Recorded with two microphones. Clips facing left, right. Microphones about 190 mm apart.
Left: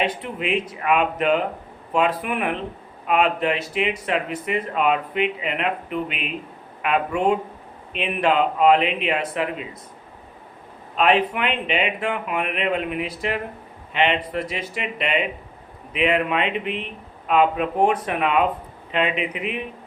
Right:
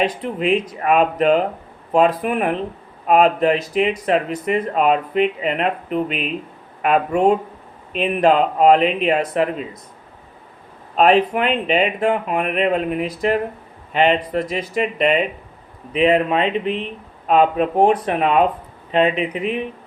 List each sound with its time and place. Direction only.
0.0 s speech: 40° right (ahead or behind)
10.9 s speech: 40° right (ahead or behind)